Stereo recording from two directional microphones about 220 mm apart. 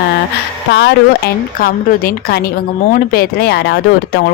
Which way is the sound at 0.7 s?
50° left (ahead or behind).